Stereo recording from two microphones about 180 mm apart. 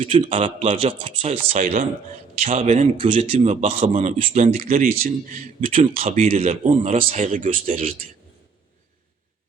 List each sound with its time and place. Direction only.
0.0 s speech: 45° right (ahead or behind)
0.3 s speech: 30° right (ahead or behind)
2.4 s a man's voice: 35° right (ahead or behind)
4.6 s speech: 55° right (ahead or behind)
6.2 s speech: 35° right (ahead or behind); by 7.9 s 50° right (ahead or behind)